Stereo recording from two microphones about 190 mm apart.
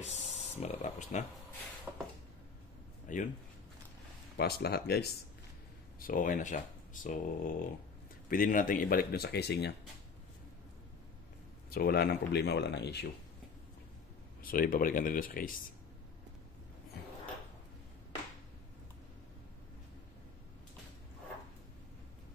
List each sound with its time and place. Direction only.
0.0 s speech: 35° left (ahead or behind)
3.1 s speech: 40° left (ahead or behind)
4.4 s speech: 55° left (ahead or behind)
5.9 s speech: 45° left (ahead or behind)
11.7 s speech: 55° left (ahead or behind)
14.4 s speech: 50° left (ahead or behind)